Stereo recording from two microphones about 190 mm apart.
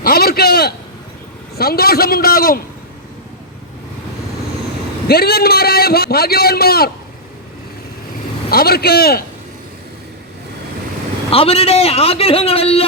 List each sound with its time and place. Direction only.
0.0 s a sound: 55° left (ahead or behind)
1.5 s a man's voice: 55° left (ahead or behind)
5.0 s a man's voice: 55° left (ahead or behind)
8.4 s a man's voice: 55° left (ahead or behind)
11.3 s a man's voice: 30° left (ahead or behind)